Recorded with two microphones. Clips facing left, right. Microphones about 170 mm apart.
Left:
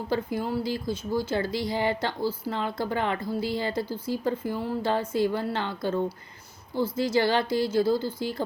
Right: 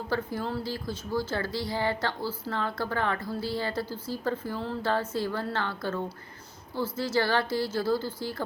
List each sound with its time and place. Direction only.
0.1 s a woman's voice: 15° left (ahead or behind)